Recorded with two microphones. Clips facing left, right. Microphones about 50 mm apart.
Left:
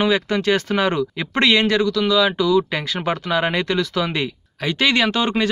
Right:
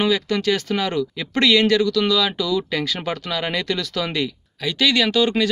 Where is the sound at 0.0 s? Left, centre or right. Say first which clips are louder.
Left 1 dB; left.